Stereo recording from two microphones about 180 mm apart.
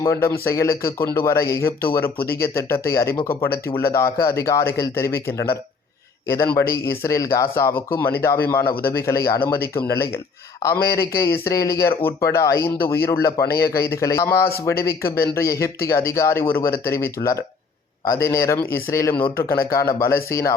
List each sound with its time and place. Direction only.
0.0 s a man's voice: 15° left (ahead or behind)
2.1 s speech: 60° left (ahead or behind)
2.4 s a man's voice: 15° left (ahead or behind)